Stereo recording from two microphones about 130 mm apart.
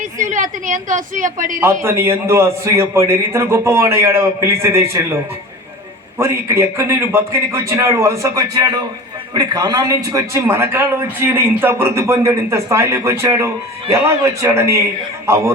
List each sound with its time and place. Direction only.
0.0 s a woman's voice: 75° right (ahead or behind)
1.6 s a man's voice: 20° right (ahead or behind)
6.1 s a man's voice: 20° right (ahead or behind)